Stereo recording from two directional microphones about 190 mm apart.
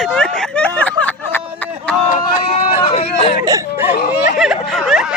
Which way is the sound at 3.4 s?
15° right (ahead or behind).